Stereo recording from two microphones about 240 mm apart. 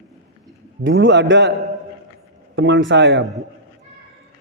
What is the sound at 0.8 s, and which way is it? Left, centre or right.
Speech, right.